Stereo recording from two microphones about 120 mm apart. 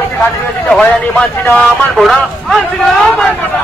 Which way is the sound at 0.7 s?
5° left (ahead or behind).